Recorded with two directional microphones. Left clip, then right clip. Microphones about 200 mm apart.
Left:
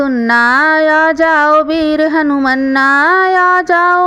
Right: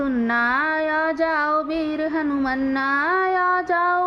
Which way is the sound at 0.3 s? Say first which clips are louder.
Left 12 dB; 35° left (ahead or behind).